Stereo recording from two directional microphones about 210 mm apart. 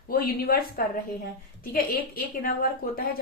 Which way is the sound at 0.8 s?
45° left (ahead or behind).